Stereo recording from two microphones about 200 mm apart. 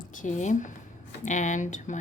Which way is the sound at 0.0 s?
40° left (ahead or behind).